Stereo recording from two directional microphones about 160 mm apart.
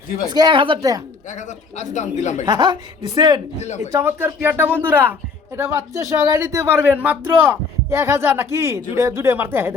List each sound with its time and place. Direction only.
0.3 s speech: 30° right (ahead or behind)
1.3 s speech: 50° left (ahead or behind)
2.5 s speech: 25° right (ahead or behind)